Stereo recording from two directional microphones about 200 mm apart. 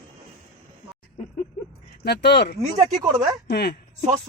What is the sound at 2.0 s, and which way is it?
Speech, 55° left (ahead or behind).